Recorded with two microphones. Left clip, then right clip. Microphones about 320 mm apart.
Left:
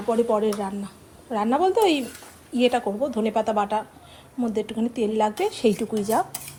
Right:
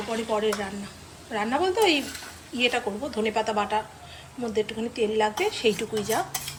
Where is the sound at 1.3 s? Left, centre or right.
Centre.